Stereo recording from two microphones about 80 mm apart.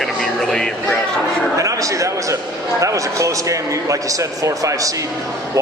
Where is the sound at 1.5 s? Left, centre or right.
Right.